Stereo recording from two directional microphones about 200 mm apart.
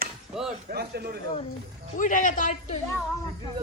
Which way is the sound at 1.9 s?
40° left (ahead or behind).